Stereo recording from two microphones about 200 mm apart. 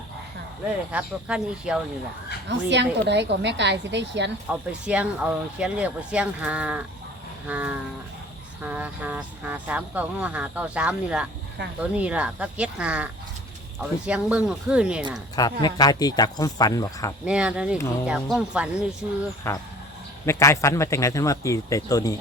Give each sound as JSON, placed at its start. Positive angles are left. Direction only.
{"t": 0.9, "sound": "speech", "side_deg": -5}
{"t": 2.5, "sound": "a woman's voice", "side_deg": -60}
{"t": 4.4, "sound": "speech", "side_deg": -5}
{"t": 14.1, "sound": "speech", "side_deg": -5}
{"t": 15.4, "sound": "speech", "side_deg": 20}
{"t": 17.2, "sound": "speech", "side_deg": -5}
{"t": 20.2, "sound": "speech", "side_deg": 15}